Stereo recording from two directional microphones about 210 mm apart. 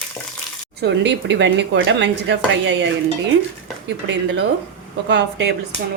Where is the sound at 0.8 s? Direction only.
55° right (ahead or behind).